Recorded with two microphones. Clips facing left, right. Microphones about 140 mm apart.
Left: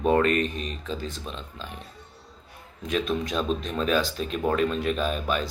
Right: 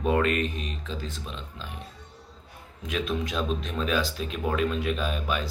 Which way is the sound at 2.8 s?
5° right (ahead or behind).